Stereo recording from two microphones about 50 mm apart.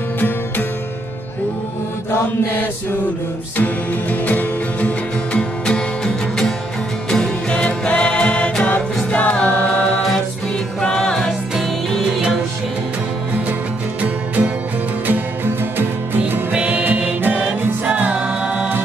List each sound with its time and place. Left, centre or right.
3.5 s music: left
5.3 s music: left
10.8 s music: centre
14.0 s music: right
15.0 s music: right
16.5 s music: right